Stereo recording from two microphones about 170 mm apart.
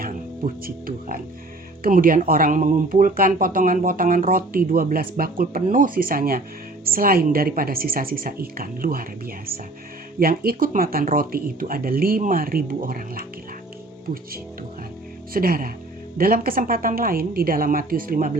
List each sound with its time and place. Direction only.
0.0 s speech: 60° right (ahead or behind)
15.3 s speech: 60° right (ahead or behind)